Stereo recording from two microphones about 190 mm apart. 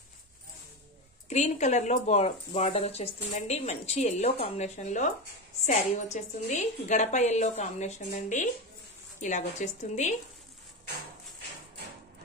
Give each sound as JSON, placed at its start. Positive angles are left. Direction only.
{"t": 1.3, "sound": "speech", "side_deg": 40}